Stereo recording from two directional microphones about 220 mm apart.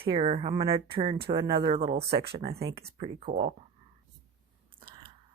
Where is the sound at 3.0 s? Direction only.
35° right (ahead or behind).